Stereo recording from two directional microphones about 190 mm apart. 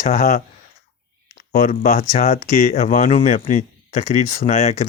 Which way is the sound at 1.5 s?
45° left (ahead or behind).